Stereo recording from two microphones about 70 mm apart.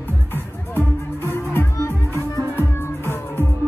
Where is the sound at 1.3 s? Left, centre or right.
Left.